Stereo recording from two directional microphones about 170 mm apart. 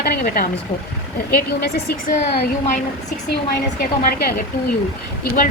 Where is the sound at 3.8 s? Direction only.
65° left (ahead or behind).